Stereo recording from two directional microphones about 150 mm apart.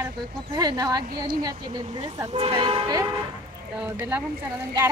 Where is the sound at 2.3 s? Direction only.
40° right (ahead or behind).